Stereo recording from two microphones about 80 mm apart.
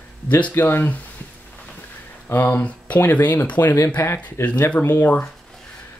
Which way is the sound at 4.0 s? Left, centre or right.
Left.